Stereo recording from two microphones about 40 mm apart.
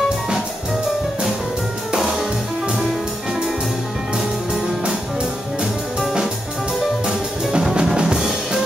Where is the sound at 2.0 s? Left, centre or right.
Centre.